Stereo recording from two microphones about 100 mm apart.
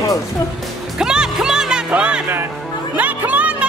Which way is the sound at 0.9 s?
5° right (ahead or behind).